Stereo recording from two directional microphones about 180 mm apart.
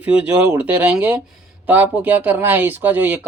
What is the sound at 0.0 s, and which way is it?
Speech, 10° right (ahead or behind).